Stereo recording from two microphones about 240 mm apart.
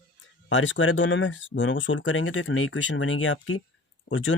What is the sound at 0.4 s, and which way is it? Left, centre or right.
Speech, left.